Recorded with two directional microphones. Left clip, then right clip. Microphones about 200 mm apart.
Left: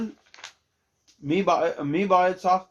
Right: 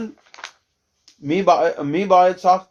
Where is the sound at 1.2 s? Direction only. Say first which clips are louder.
Right 6 dB; 40° right (ahead or behind).